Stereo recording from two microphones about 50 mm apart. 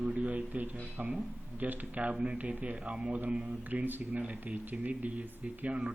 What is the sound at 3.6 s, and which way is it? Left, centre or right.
Speech, right.